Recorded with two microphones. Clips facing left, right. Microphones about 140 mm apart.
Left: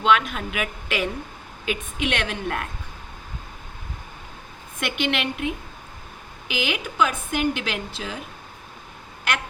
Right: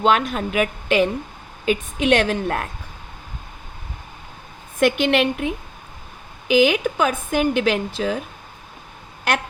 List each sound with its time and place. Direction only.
0.0 s speech: 35° right (ahead or behind)
4.8 s a woman's voice: 40° right (ahead or behind)
6.5 s a woman's voice: 45° right (ahead or behind)